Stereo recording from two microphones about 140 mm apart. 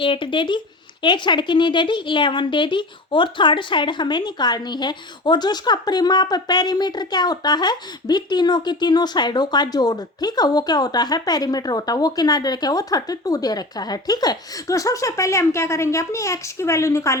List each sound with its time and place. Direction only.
0.0 s speech: 35° left (ahead or behind); by 17.2 s 20° left (ahead or behind)